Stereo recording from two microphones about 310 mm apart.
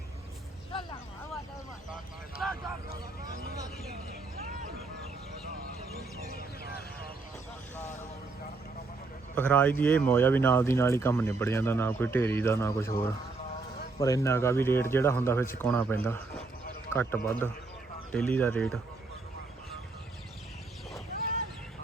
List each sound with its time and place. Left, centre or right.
2.4 s a sound: centre
6.2 s music: left
9.3 s speech: centre
14.0 s speech: centre